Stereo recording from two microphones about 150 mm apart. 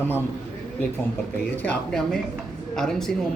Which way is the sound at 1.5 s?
10° left (ahead or behind).